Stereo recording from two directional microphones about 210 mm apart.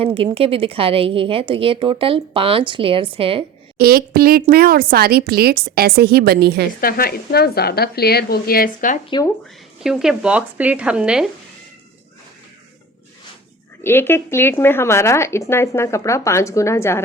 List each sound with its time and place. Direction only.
0.0 s a woman's voice: 25° right (ahead or behind)
3.8 s a woman's voice: 45° right (ahead or behind)
6.8 s speech: 45° left (ahead or behind)
9.8 s speech: centre (ahead or behind)
13.8 s speech: 10° left (ahead or behind)